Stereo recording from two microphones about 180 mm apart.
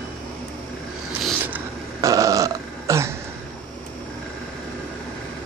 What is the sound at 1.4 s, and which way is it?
Burping, 15° right (ahead or behind).